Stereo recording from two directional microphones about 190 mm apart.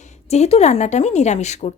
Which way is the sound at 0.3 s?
35° left (ahead or behind).